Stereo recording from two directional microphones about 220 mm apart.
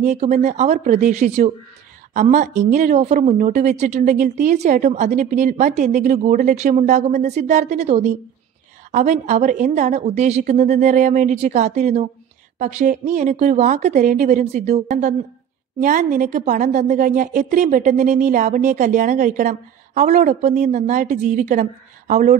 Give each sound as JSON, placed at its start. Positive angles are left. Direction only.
{"t": 0.0, "sound": "a woman's voice", "side_deg": -30}